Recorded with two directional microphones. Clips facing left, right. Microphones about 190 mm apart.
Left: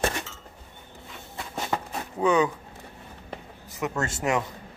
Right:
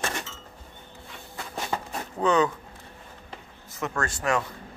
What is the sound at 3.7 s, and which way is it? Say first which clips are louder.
Speech: left 1 dB; 15° left (ahead or behind).